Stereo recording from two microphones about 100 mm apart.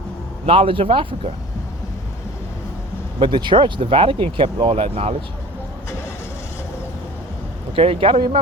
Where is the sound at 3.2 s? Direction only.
55° right (ahead or behind); by 5.1 s 85° right.